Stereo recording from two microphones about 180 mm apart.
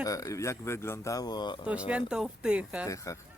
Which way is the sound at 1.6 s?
5° right (ahead or behind).